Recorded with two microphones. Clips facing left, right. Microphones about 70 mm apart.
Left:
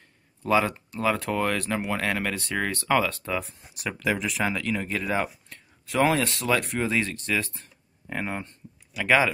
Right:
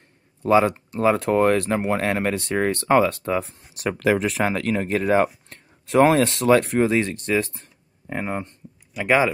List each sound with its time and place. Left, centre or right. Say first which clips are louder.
0.5 s speech: right 6 dB; right
0.9 s speech: right 6 dB; right
1.2 s speech: right 8 dB; right
8.1 s speech: right 4 dB; centre
8.9 s speech: right 3 dB; centre